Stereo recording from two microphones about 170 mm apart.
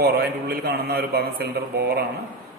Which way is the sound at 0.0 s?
70° right (ahead or behind).